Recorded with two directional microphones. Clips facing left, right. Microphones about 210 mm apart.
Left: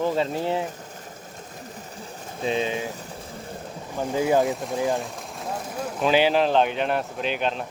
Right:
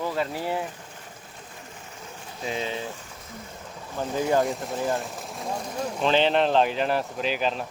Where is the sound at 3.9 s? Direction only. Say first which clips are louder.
Left 2 dB; 15° left (ahead or behind).